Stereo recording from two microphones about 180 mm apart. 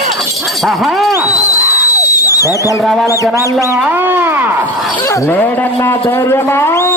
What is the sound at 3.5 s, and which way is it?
Speech, 15° right (ahead or behind).